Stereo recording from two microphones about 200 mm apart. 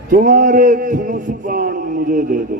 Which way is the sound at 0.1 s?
45° right (ahead or behind).